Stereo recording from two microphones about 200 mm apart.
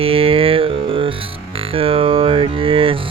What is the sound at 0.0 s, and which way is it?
Music, 30° right (ahead or behind).